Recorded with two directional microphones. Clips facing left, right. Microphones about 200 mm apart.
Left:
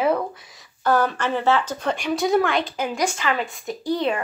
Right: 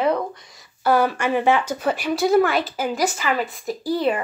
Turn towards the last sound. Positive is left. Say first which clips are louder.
# right 2 dB
turn(degrees=-5)  # may be behind; listen again after turning